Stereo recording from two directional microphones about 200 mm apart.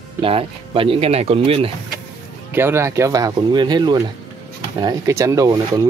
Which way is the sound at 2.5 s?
10° right (ahead or behind).